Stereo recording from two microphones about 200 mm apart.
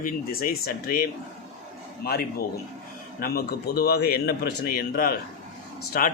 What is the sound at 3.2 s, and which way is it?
A man's voice, 50° left (ahead or behind).